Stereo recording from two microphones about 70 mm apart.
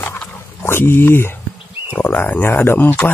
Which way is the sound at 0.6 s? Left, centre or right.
Left.